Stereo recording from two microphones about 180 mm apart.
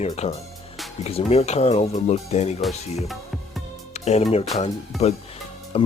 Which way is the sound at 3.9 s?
35° left (ahead or behind).